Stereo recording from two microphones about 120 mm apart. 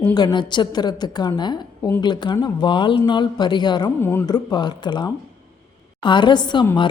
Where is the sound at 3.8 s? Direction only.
20° left (ahead or behind).